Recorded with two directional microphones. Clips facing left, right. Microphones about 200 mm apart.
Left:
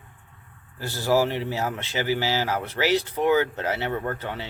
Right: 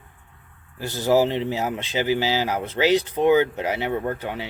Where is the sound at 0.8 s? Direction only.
20° right (ahead or behind).